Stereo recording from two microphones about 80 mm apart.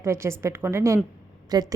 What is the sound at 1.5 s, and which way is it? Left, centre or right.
Speech, right.